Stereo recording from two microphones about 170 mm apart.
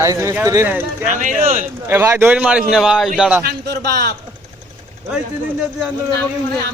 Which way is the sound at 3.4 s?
65° right (ahead or behind).